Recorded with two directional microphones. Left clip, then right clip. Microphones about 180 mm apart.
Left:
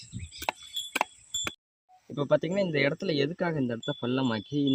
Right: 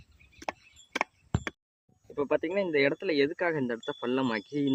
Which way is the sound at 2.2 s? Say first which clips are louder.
Left 2 dB; 50° left (ahead or behind).